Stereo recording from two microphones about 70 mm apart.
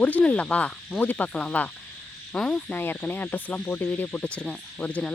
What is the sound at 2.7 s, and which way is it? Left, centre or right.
Speech, left.